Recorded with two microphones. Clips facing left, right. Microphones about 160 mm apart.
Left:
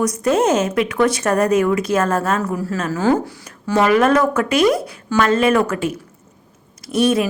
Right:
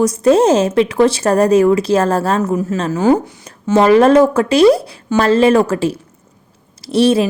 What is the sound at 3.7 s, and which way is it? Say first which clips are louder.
A woman's voice: right 5 dB; 30° right (ahead or behind).